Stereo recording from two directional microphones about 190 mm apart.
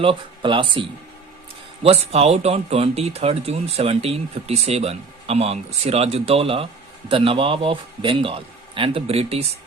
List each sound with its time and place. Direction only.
0.0 s a man's voice: 25° right (ahead or behind)